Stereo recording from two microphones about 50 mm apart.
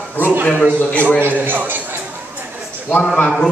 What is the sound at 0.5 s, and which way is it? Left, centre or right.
Speech, left.